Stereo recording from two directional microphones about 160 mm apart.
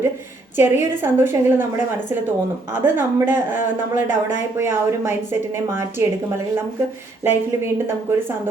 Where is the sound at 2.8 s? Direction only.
10° right (ahead or behind).